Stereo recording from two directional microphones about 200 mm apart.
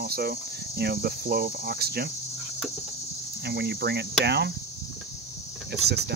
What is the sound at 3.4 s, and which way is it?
Cricket, 55° right (ahead or behind).